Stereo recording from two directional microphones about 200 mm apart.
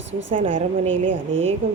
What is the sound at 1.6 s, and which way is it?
Speech, 30° right (ahead or behind).